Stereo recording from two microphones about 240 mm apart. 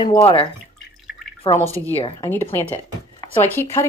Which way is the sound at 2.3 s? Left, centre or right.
Centre.